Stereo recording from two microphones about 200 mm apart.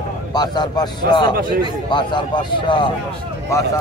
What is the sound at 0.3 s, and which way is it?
Speech, 20° left (ahead or behind).